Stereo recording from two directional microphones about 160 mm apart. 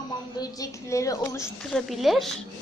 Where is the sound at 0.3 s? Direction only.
25° left (ahead or behind).